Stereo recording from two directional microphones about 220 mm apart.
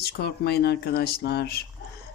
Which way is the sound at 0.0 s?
45° left (ahead or behind).